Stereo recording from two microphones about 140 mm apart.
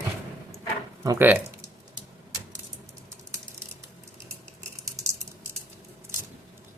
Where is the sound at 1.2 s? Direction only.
15° right (ahead or behind).